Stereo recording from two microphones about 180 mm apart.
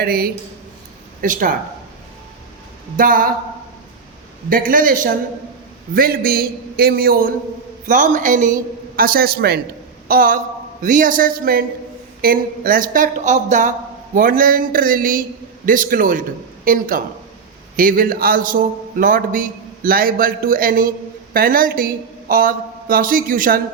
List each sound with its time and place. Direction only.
0.0 s a man's voice: 55° right (ahead or behind)
3.0 s a man's voice: 50° right (ahead or behind)
4.4 s a man's voice: 50° right (ahead or behind)